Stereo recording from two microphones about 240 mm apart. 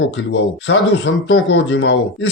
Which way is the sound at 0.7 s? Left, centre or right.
Left.